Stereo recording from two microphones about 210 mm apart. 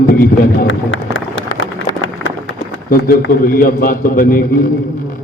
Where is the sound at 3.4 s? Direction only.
45° left (ahead or behind).